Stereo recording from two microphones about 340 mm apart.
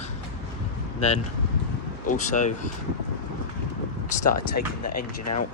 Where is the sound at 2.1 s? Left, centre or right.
Left.